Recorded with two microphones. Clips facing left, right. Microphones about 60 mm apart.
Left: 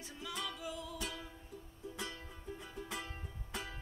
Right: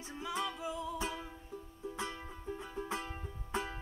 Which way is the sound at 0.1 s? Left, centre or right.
Right.